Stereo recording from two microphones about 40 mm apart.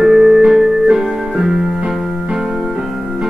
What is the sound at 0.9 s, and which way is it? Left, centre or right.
Keyboard, centre.